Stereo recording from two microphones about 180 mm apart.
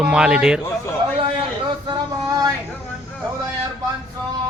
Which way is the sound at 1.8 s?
20° right (ahead or behind).